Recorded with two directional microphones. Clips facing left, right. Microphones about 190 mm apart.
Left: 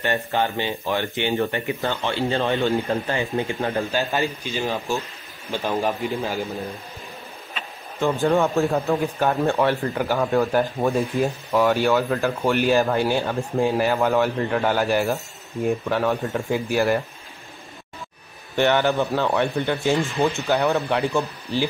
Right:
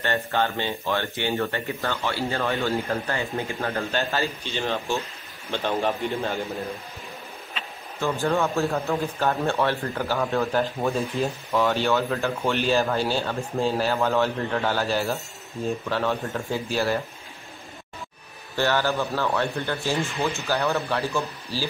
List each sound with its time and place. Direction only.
0.0 s a man's voice: 15° left (ahead or behind)
8.0 s speech: 15° left (ahead or behind)
18.6 s speech: 20° left (ahead or behind)